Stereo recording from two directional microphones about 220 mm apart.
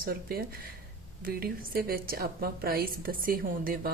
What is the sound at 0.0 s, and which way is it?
A woman's voice, 45° right (ahead or behind).